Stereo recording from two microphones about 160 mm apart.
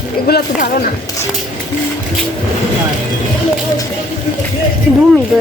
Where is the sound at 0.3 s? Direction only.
75° left (ahead or behind).